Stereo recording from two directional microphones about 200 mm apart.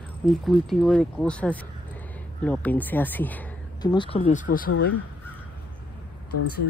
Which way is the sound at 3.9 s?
30° left (ahead or behind).